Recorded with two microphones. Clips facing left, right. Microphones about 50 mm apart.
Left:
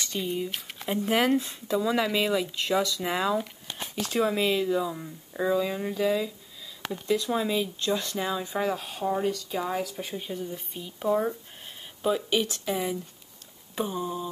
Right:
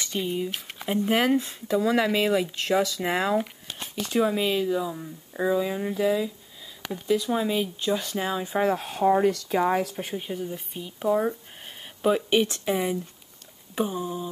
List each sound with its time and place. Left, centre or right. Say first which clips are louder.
0.0 s speech: right 2 dB; centre
1.8 s speech: right 3 dB; centre
5.4 s speech: right 1 dB; centre
8.7 s speech: right 7 dB; right
10.1 s speech: right 3 dB; centre
12.0 s speech: right 4 dB; right
13.7 s speech: right 2 dB; centre